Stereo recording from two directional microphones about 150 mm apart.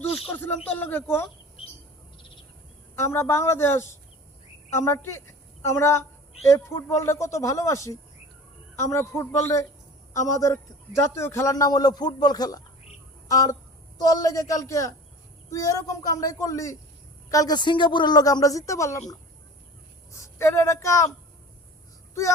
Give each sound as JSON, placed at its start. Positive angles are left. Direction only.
{"t": 0.0, "sound": "a woman's voice", "side_deg": 15}
{"t": 2.9, "sound": "a woman's voice", "side_deg": 15}
{"t": 20.1, "sound": "speech", "side_deg": 20}